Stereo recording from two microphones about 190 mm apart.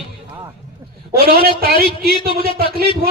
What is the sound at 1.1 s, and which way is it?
A man's voice, 55° right (ahead or behind).